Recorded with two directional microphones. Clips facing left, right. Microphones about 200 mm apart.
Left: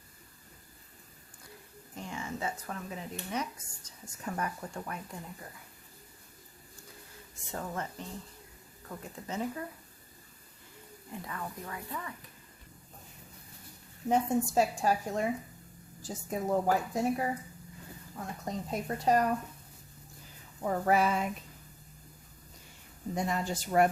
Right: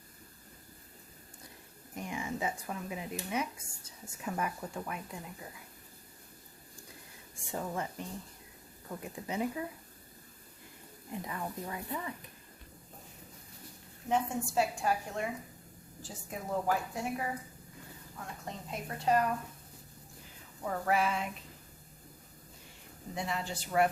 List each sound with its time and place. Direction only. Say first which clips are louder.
2.0 s speech: right 1 dB; 15° right (ahead or behind)
7.5 s speech: right 1 dB; 10° right (ahead or behind)
11.1 s speech: right 2 dB; 20° right (ahead or behind)
14.1 s a woman's voice: left 4 dB; 40° left (ahead or behind)
18.4 s a woman's voice: left 7 dB; 40° left (ahead or behind)
20.7 s a woman's voice: left 4 dB; 35° left (ahead or behind)
23.1 s speech: left 4 dB; 45° left (ahead or behind)